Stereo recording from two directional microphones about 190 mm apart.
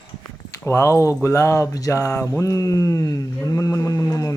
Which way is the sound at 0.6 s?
15° left (ahead or behind).